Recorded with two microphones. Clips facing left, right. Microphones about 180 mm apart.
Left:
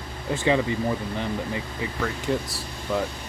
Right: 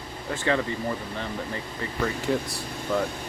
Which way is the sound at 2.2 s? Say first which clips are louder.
Even; centre (ahead or behind).